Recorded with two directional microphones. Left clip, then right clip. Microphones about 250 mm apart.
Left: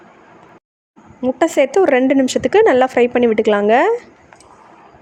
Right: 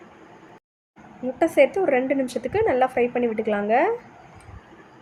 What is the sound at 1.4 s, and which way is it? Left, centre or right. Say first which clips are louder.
A woman's voice: left 5 dB; left.